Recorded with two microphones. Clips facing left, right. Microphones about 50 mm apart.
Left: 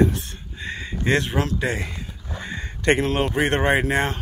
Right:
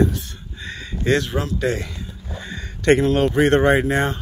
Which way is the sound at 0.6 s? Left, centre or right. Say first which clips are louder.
Even; left.